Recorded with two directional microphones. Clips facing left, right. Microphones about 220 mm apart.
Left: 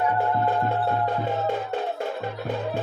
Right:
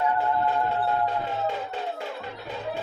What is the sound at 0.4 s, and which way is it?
Music, 55° left (ahead or behind).